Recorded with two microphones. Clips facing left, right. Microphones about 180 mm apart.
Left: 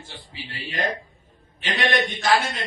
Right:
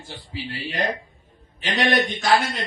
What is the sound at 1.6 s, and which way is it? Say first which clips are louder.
Speech: right 2 dB; 45° right (ahead or behind).